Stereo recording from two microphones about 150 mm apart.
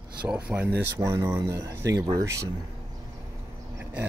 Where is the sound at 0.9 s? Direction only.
20° right (ahead or behind).